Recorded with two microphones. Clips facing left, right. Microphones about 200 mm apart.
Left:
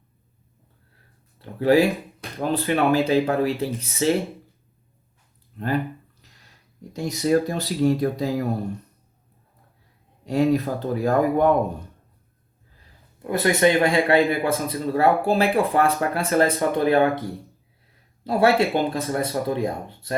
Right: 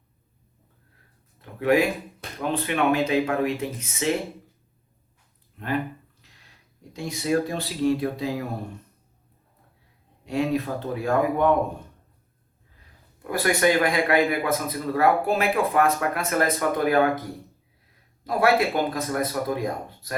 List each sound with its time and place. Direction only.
1.4 s speech: 30° left (ahead or behind)
5.5 s speech: 35° left (ahead or behind)
6.9 s speech: 40° left (ahead or behind)
10.2 s speech: 35° left (ahead or behind)
12.8 s speech: 25° left (ahead or behind)